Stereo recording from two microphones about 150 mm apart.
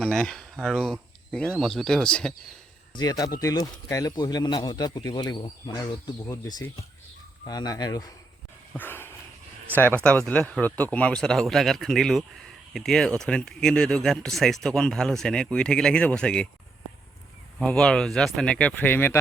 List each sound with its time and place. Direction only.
0.0 s speech: 5° left (ahead or behind)
2.9 s speech: 25° left (ahead or behind)
8.7 s a sound: 15° left (ahead or behind)
9.7 s speech: 10° left (ahead or behind)
17.6 s speech: 5° left (ahead or behind)